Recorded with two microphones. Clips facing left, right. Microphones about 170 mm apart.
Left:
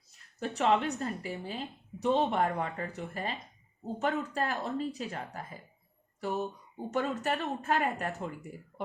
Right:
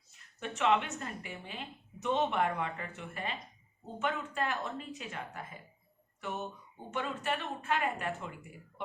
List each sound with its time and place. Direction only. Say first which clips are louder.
0.3 s a woman's voice: left 2 dB; 35° left (ahead or behind)